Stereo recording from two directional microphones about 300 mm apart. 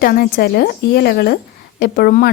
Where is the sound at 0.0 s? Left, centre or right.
Left.